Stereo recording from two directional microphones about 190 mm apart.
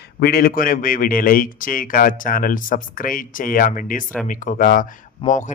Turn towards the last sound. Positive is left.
turn(degrees=40)  # may be behind; listen again after turning